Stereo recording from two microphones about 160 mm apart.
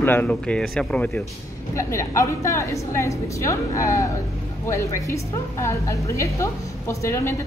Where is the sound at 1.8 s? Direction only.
20° left (ahead or behind).